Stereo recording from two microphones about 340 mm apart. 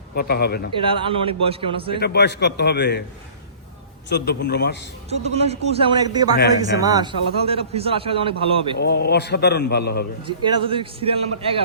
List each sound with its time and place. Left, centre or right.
0.1 s a man's voice: left
0.9 s a man's voice: centre
2.0 s a man's voice: left
4.1 s a man's voice: left
5.0 s a man's voice: centre
6.3 s speech: left
6.8 s a man's voice: centre
8.8 s a man's voice: left
10.2 s a man's voice: centre